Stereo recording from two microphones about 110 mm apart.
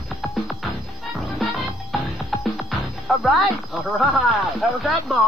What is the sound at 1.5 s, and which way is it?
Music, centre (ahead or behind).